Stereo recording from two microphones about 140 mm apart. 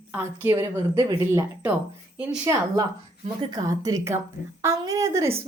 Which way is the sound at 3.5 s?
25° right (ahead or behind).